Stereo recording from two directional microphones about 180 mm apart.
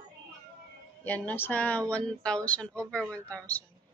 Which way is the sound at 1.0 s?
10° left (ahead or behind).